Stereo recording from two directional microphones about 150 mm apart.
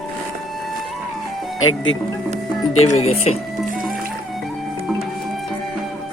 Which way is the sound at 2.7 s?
50° left (ahead or behind).